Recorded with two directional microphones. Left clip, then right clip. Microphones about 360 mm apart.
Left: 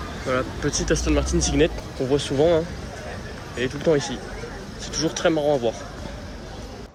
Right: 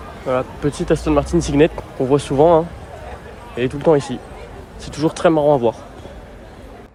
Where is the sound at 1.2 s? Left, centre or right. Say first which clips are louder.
Right 5 dB; right.